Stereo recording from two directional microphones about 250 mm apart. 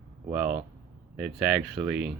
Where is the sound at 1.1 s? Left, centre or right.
Centre.